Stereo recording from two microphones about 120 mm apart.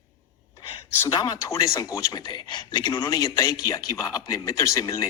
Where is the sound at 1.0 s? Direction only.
35° left (ahead or behind).